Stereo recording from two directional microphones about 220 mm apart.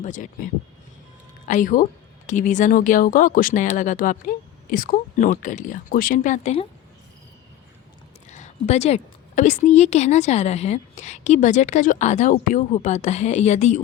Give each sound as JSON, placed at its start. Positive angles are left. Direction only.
{"t": 0.0, "sound": "a woman's voice", "side_deg": 35}
{"t": 1.5, "sound": "a woman's voice", "side_deg": 35}
{"t": 8.3, "sound": "a woman's voice", "side_deg": 30}